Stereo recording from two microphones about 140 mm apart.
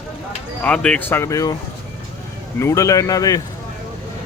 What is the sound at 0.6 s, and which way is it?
Speech, 5° left (ahead or behind).